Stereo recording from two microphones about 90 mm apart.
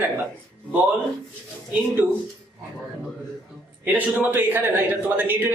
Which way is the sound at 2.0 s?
20° right (ahead or behind).